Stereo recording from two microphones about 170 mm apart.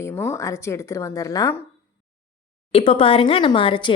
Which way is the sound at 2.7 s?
35° left (ahead or behind).